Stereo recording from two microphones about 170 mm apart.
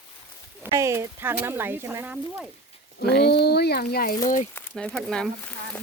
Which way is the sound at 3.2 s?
70° left (ahead or behind).